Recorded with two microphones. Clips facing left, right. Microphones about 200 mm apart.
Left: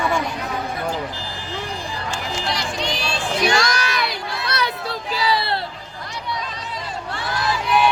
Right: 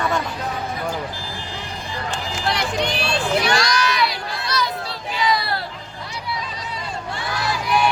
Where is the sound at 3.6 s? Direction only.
55° left (ahead or behind).